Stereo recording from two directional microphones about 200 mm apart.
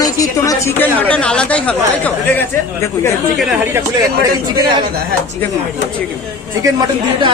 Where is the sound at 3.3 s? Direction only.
10° right (ahead or behind).